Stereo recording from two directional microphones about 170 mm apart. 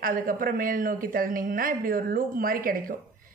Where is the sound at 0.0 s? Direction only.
55° right (ahead or behind).